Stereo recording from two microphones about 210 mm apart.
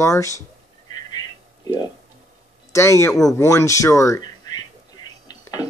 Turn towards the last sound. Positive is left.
turn(degrees=20)  # may be behind; listen again after turning